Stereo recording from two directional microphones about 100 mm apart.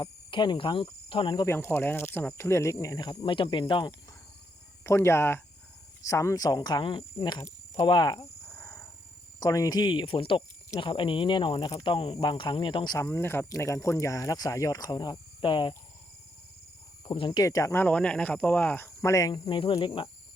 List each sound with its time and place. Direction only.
0.0 s speech: 50° left (ahead or behind)
1.5 s speech: 25° left (ahead or behind)
3.0 s speech: 45° left (ahead or behind)
3.3 s speech: 60° left (ahead or behind)
4.8 s speech: 25° left (ahead or behind); by 8.3 s 40° left (ahead or behind)
8.5 s a sound: 25° left (ahead or behind)
9.4 s speech: 40° left (ahead or behind)
13.0 s speech: 25° left (ahead or behind); by 15.2 s 40° left (ahead or behind)
15.4 s speech: 55° left (ahead or behind)
17.1 s speech: 50° left (ahead or behind)
17.4 s speech: 35° left (ahead or behind)
17.8 s speech: 10° left (ahead or behind)
19.0 s speech: 30° left (ahead or behind)
19.3 s speech: 60° left (ahead or behind)